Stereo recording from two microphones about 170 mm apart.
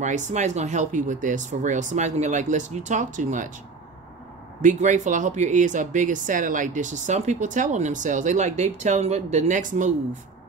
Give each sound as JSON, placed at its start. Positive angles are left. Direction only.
{"t": 0.0, "sound": "speech", "side_deg": -45}
{"t": 4.6, "sound": "speech", "side_deg": -45}